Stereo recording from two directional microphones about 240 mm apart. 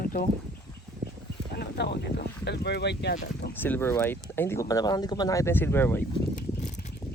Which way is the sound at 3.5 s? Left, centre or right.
Centre.